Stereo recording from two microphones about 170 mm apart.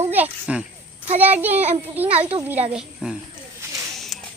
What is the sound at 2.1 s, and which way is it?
Speech, 35° right (ahead or behind).